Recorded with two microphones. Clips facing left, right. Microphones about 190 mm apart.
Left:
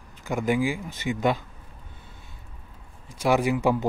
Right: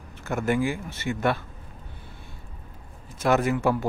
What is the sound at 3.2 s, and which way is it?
Speech, 10° left (ahead or behind).